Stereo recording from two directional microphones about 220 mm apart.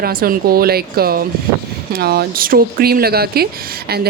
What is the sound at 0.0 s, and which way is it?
Speech, 40° right (ahead or behind).